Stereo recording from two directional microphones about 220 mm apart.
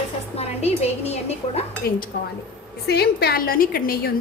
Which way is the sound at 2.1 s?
45° left (ahead or behind).